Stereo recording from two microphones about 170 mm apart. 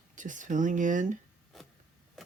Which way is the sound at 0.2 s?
50° right (ahead or behind).